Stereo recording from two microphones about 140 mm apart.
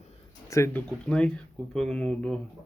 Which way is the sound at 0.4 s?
20° left (ahead or behind).